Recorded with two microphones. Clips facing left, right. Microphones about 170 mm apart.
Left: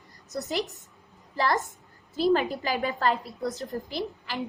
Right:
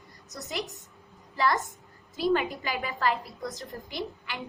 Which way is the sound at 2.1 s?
35° left (ahead or behind).